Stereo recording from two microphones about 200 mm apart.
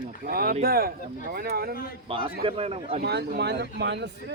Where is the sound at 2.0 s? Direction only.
25° right (ahead or behind).